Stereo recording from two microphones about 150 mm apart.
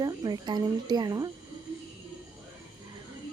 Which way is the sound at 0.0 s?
25° right (ahead or behind).